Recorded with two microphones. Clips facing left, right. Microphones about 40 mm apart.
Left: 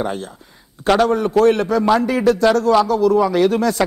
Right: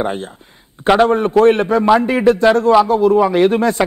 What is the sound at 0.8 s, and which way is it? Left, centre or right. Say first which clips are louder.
A man's voice: right 3 dB; right.